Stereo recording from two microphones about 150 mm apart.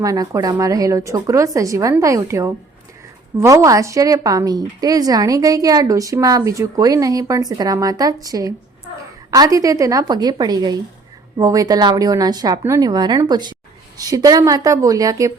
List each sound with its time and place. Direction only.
0.0 s a woman's voice: 25° right (ahead or behind)